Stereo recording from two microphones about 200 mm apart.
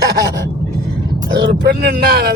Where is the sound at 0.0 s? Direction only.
55° right (ahead or behind).